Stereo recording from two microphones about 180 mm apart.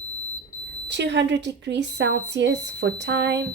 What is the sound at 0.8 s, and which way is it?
A woman's voice, 70° right (ahead or behind).